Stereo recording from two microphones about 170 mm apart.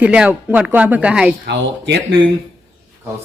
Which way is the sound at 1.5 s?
90° right.